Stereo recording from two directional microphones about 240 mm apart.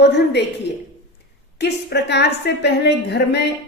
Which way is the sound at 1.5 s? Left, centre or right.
Left.